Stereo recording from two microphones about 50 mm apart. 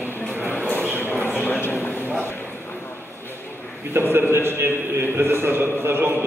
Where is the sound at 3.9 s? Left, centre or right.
Right.